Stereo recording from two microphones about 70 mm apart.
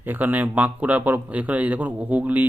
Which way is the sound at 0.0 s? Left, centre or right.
Right.